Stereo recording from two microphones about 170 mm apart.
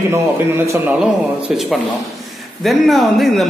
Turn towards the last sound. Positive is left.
turn(degrees=0)  # may be behind; listen again after turning